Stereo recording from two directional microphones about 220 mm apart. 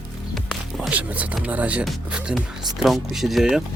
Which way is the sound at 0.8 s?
5° right (ahead or behind).